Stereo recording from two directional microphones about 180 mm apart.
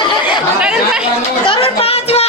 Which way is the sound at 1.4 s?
30° left (ahead or behind).